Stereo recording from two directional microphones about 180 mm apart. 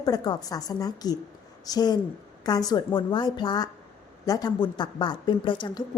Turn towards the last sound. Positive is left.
turn(degrees=25)  # may be behind; listen again after turning